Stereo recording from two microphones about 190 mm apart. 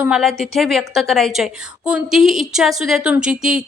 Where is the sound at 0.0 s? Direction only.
Centre (ahead or behind).